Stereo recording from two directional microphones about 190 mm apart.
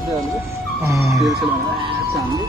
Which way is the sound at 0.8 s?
15° right (ahead or behind).